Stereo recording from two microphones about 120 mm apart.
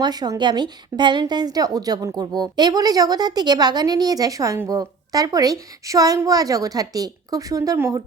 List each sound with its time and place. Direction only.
0.0 s a woman's voice: 35° right (ahead or behind)